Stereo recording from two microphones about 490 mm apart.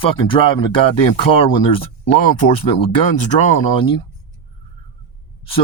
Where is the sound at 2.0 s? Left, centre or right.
Centre.